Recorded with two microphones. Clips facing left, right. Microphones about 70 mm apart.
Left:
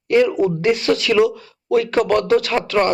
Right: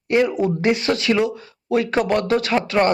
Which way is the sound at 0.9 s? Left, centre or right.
Right.